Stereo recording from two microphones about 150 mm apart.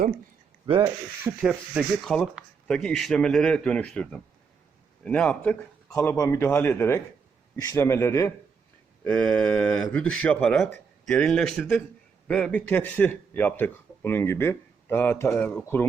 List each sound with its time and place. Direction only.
0.7 s speech: 40° right (ahead or behind)
1.2 s a man's voice: 5° right (ahead or behind)
5.9 s a man's voice: 20° left (ahead or behind)